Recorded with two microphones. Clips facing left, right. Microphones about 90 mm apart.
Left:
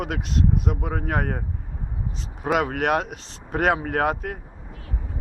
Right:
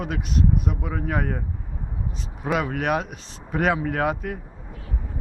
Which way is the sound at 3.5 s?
50° left (ahead or behind).